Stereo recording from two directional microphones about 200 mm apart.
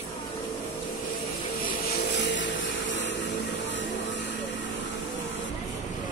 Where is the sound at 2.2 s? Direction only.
60° left (ahead or behind).